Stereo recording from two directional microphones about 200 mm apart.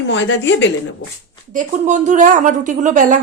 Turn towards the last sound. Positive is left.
turn(degrees=-40)  # may be behind; listen again after turning